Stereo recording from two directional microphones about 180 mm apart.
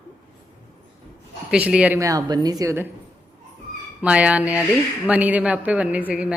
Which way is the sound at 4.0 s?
5° right (ahead or behind).